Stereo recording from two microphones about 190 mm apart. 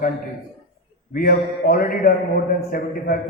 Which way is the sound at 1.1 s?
50° left (ahead or behind).